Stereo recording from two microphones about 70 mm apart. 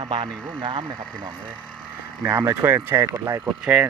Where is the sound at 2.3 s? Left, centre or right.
Right.